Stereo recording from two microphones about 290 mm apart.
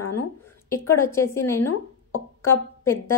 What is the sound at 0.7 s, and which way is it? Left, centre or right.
Speech, centre.